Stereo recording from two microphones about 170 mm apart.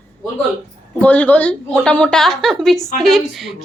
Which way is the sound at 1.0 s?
10° left (ahead or behind).